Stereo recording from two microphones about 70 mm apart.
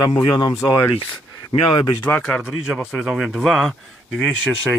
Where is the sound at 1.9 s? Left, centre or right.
Left.